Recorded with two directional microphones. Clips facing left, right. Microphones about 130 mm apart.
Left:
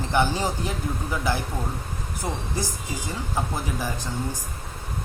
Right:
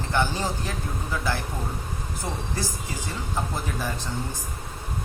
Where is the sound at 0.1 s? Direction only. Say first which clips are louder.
Left 2 dB; 15° left (ahead or behind).